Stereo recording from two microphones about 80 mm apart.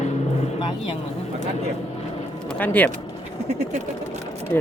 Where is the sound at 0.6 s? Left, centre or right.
Left.